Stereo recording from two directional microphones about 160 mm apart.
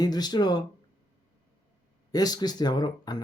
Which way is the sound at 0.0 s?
25° left (ahead or behind).